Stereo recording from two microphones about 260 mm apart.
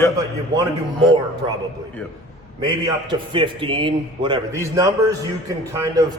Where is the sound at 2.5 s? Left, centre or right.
Centre.